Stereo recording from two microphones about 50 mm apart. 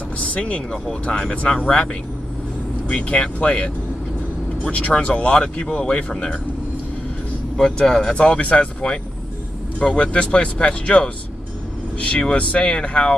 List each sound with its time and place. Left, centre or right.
0.3 s speech: left
2.9 s speech: left
7.5 s speech: centre